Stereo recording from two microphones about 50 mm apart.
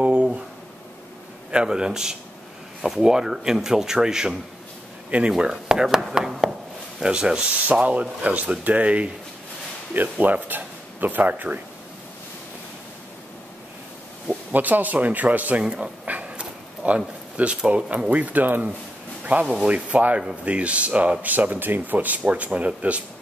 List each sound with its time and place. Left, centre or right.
0.0 s a sound: right
1.5 s speech: centre
5.4 s speech: centre
9.9 s speech: right
14.5 s speech: right
15.6 s speech: centre
16.1 s dog: right
18.1 s speech: right